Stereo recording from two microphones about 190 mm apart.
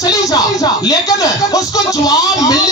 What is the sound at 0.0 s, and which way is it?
Music, 20° left (ahead or behind).